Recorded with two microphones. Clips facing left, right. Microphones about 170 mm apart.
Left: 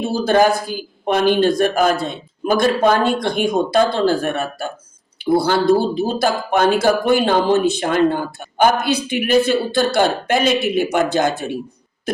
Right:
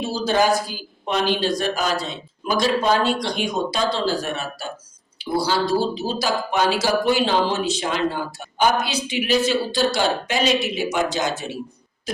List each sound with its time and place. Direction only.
0.0 s speech: 55° left (ahead or behind)
12.1 s owl: 55° left (ahead or behind)